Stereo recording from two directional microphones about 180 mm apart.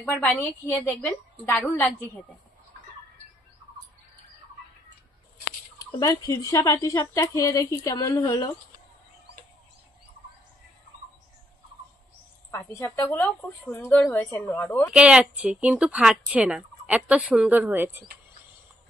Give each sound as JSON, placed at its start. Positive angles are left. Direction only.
{"t": 0.0, "sound": "a woman's voice", "side_deg": 10}
{"t": 5.9, "sound": "a woman's voice", "side_deg": 20}
{"t": 12.4, "sound": "a woman's voice", "side_deg": 10}
{"t": 14.9, "sound": "speech", "side_deg": -5}